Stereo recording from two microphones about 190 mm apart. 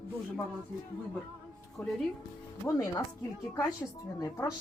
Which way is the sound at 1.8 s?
5° left (ahead or behind).